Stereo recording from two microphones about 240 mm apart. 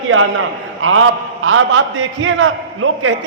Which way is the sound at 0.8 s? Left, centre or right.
Right.